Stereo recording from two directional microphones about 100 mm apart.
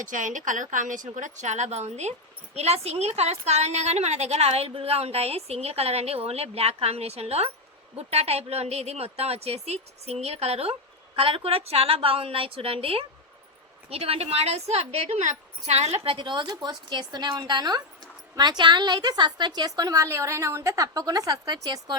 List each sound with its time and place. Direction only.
1.7 s a woman's voice: 90° right
11.1 s a woman's voice: 70° right (ahead or behind); by 16.1 s 90° right
16.1 s a woman's voice: 50° right (ahead or behind)